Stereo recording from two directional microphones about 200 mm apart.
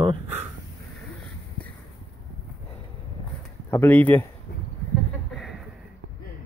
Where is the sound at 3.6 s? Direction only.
10° left (ahead or behind).